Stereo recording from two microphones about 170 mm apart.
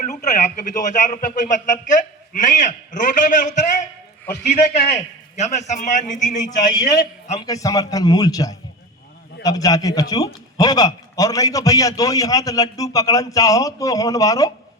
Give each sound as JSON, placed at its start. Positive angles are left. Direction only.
{"t": 0.0, "sound": "a man's voice", "side_deg": 45}
{"t": 6.4, "sound": "a man's voice", "side_deg": 25}